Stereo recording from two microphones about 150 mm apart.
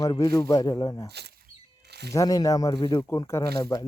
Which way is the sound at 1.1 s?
90° right.